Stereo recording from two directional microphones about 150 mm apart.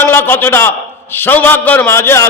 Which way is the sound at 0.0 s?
15° left (ahead or behind).